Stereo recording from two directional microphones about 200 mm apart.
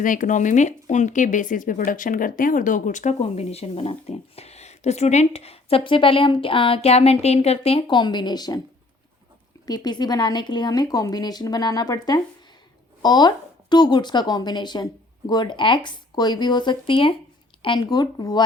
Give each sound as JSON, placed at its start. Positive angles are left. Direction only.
{"t": 0.0, "sound": "speech", "side_deg": 40}
{"t": 9.6, "sound": "a woman's voice", "side_deg": 20}